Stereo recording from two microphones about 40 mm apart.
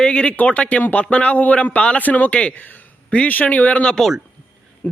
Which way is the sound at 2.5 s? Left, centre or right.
Left.